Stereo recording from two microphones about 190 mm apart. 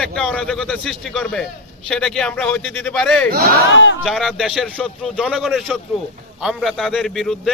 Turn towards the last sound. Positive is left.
turn(degrees=0)  # may be behind; listen again after turning